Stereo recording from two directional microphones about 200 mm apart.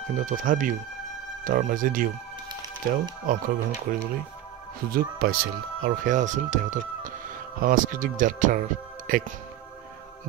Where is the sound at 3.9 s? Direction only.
45° right (ahead or behind).